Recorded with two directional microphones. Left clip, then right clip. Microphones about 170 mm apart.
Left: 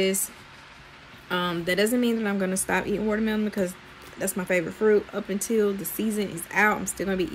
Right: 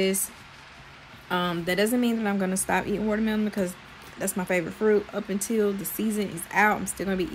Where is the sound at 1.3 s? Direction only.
5° left (ahead or behind).